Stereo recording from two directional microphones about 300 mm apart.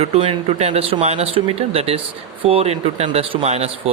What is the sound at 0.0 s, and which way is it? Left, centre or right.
Speech, right.